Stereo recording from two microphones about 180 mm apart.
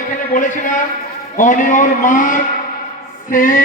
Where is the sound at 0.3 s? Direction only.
45° left (ahead or behind).